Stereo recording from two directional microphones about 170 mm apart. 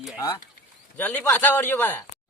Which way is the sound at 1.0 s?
10° left (ahead or behind).